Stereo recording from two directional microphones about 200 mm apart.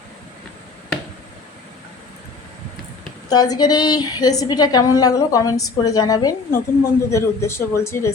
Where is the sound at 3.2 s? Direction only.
20° left (ahead or behind).